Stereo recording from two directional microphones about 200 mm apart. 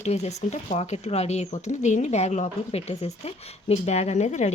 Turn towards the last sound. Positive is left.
turn(degrees=35)  # may be behind; listen again after turning